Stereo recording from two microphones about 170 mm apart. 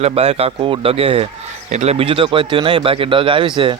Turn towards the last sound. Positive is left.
turn(degrees=-30)  # may be behind; listen again after turning